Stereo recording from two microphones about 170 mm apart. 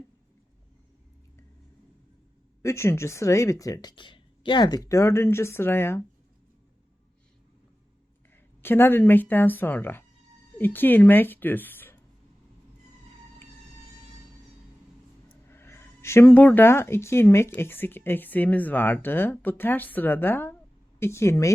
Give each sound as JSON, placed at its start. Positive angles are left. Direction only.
{"t": 2.6, "sound": "speech", "side_deg": 15}
{"t": 8.6, "sound": "speech", "side_deg": 10}
{"t": 15.4, "sound": "speech", "side_deg": 15}